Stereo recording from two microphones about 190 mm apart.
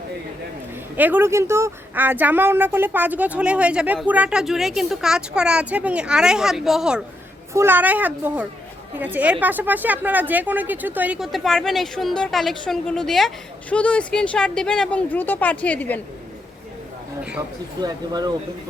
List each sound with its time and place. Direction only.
0.9 s a woman's voice: 10° right (ahead or behind); by 16.0 s 10° left (ahead or behind)
17.7 s speech: 20° right (ahead or behind)